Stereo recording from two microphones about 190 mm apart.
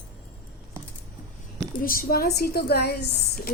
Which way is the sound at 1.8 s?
50° left (ahead or behind).